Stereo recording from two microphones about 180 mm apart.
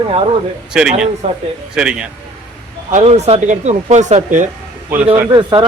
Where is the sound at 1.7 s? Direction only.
5° right (ahead or behind).